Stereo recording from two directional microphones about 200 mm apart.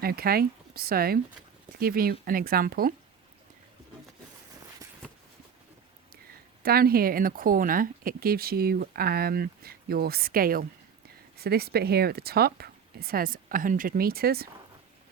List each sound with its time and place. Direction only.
0.0 s speech: 50° right (ahead or behind)
6.6 s speech: 50° right (ahead or behind)